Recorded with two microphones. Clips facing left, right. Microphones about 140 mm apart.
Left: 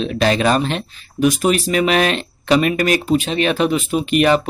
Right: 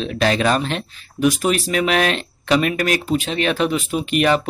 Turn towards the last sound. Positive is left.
turn(degrees=5)  # may be behind; listen again after turning